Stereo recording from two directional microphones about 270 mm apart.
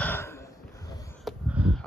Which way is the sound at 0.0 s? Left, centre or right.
Centre.